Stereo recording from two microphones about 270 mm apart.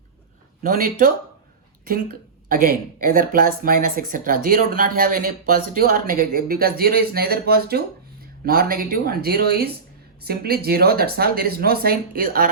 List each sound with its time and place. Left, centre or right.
0.6 s speech: right